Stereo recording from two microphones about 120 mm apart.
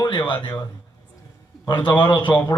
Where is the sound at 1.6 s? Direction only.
40° left (ahead or behind).